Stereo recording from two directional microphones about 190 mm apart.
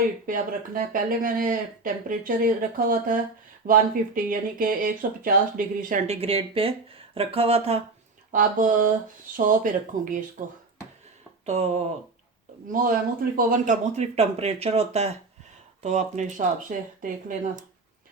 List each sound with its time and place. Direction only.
0.3 s speech: 45° right (ahead or behind)
6.1 s speech: 30° right (ahead or behind)
8.3 s speech: 45° right (ahead or behind)
11.4 s speech: 35° right (ahead or behind)
12.6 s speech: 45° right (ahead or behind)